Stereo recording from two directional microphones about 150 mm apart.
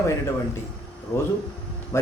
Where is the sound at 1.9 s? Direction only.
20° left (ahead or behind).